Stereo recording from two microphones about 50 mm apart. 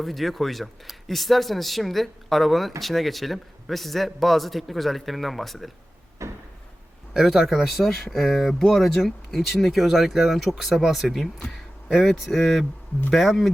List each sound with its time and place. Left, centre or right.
0.0 s speech: centre
6.2 s a sound: right
7.1 s speech: centre